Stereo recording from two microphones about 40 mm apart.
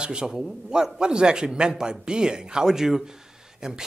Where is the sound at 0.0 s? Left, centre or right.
Right.